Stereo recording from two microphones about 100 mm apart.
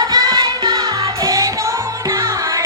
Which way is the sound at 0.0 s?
40° right (ahead or behind).